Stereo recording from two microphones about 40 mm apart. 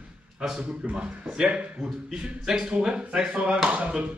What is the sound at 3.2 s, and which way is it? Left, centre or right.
Speech, right.